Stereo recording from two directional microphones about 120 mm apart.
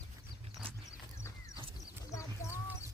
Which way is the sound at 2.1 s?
25° left (ahead or behind).